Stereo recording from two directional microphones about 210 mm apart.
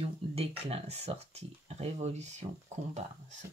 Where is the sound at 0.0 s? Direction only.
30° right (ahead or behind).